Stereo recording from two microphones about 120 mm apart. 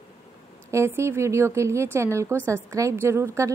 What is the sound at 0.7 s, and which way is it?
A woman's voice, 25° right (ahead or behind).